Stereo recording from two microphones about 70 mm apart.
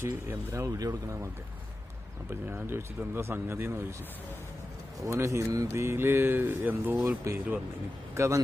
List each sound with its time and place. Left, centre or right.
0.0 s speech: right
0.8 s speech: right
2.3 s speech: right
5.0 s speech: right
7.3 s a man's voice: right